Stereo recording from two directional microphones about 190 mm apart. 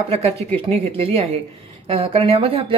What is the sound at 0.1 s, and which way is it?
Speech, 35° right (ahead or behind).